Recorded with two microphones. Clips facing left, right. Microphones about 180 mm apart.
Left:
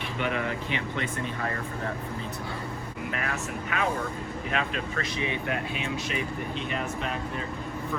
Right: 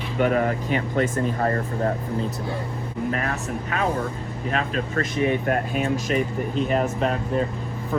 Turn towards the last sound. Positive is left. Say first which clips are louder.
# right 8 dB
turn(degrees=-40)  # may be behind; listen again after turning